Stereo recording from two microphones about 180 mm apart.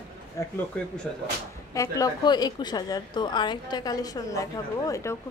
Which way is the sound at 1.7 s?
20° left (ahead or behind).